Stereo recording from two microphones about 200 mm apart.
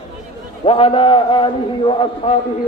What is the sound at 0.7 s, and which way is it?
A man's voice, 30° left (ahead or behind).